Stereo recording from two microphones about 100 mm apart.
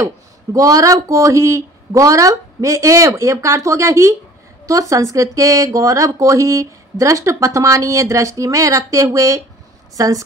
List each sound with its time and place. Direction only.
0.0 s speech: 35° right (ahead or behind)